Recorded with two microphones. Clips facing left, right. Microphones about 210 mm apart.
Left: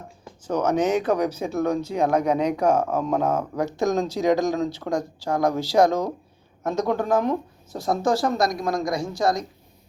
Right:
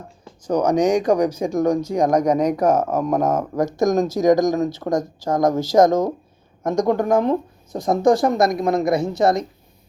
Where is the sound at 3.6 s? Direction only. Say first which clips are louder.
Right 7 dB; 45° right (ahead or behind).